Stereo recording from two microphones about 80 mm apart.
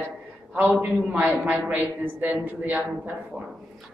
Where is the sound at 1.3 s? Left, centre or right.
Centre.